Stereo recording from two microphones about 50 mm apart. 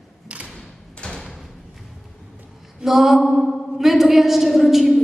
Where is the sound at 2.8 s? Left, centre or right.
Centre.